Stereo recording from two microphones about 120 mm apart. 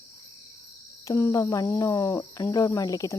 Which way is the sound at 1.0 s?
25° left (ahead or behind).